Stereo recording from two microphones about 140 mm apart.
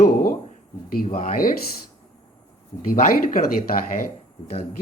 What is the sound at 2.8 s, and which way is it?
Speech, 80° left.